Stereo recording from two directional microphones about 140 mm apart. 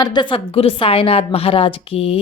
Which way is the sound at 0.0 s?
30° left (ahead or behind).